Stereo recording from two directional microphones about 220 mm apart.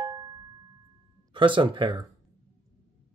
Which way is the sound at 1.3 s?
20° right (ahead or behind).